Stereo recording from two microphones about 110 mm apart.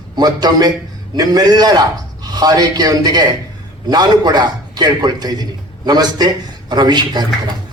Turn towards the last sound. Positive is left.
turn(degrees=-40)  # may be behind; listen again after turning